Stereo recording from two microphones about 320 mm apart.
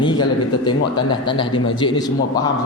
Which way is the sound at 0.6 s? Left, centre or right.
Centre.